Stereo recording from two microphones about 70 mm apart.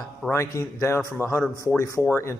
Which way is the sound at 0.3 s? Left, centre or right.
Left.